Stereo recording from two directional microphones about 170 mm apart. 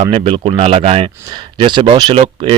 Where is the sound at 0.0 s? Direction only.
35° right (ahead or behind).